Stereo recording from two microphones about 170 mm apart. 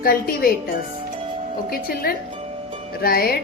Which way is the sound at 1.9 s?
60° left (ahead or behind).